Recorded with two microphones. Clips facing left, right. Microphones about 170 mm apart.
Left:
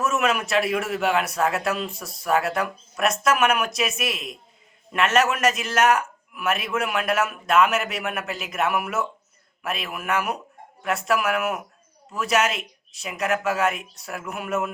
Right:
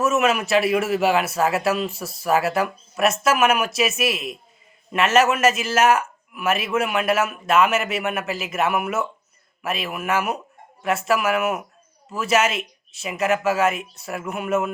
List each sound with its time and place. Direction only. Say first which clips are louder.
0.0 s a man's voice: right 3 dB; 5° right (ahead or behind)